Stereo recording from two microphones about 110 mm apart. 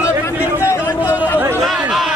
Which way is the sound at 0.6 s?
20° left (ahead or behind).